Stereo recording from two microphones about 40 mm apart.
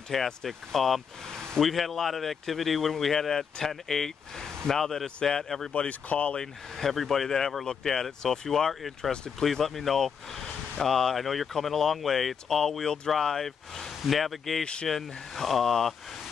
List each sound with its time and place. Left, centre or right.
0.1 s speech: centre
5.7 s speech: left
6.3 s speech: centre
12.8 s speech: centre
13.2 s speech: centre
14.6 s speech: left
14.9 s speech: centre